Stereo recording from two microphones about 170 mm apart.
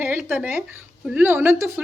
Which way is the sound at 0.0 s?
15° right (ahead or behind).